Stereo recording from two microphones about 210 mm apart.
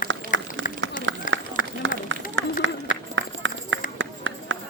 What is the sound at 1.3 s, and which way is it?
Run, 65° right (ahead or behind).